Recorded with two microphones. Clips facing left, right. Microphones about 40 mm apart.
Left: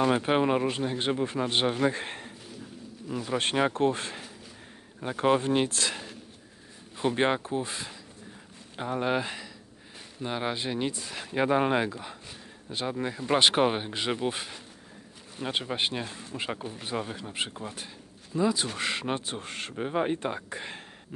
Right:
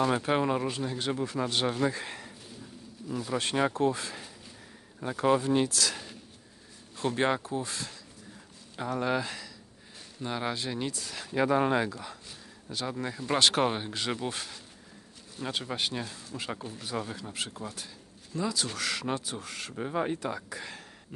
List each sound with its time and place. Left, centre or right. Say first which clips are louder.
0.0 s speech: left 2 dB; left
2.0 s a man's voice: left 2 dB; left
7.0 s speech: left 2 dB; left